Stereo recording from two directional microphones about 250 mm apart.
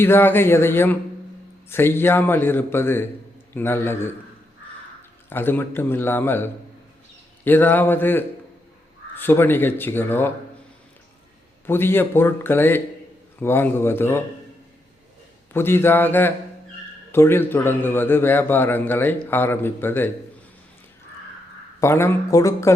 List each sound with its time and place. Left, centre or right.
0.0 s a man's voice: centre
5.3 s a man's voice: centre
11.6 s a man's voice: centre
15.5 s a man's voice: centre
21.8 s a man's voice: centre